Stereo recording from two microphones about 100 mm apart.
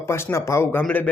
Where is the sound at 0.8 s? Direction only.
15° left (ahead or behind).